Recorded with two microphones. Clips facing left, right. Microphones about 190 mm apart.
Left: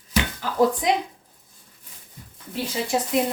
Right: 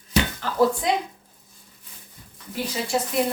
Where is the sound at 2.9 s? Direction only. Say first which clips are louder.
Even; 20° left (ahead or behind).